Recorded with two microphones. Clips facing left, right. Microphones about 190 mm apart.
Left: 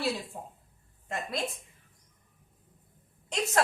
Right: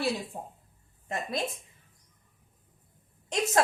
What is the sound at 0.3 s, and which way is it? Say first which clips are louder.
Speech: right 2 dB; 25° right (ahead or behind).